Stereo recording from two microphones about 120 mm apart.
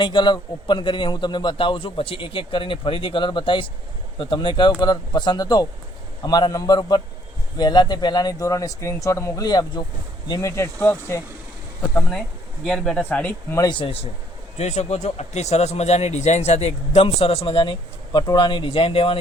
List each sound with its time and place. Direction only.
0.0 s a man's voice: 40° left (ahead or behind)
10.5 s speech: 20° left (ahead or behind)
12.6 s speech: 5° left (ahead or behind)
13.6 s a man's voice: 40° left (ahead or behind)
14.6 s speech: 70° left (ahead or behind); by 18.2 s 45° left (ahead or behind)
18.2 s a man's voice: 35° left (ahead or behind); by 19.2 s 50° left (ahead or behind)